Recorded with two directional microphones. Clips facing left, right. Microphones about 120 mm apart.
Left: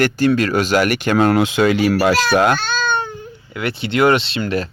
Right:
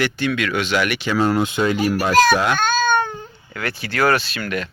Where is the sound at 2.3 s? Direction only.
50° left (ahead or behind).